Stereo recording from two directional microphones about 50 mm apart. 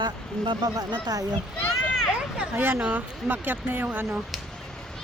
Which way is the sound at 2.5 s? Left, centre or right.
Right.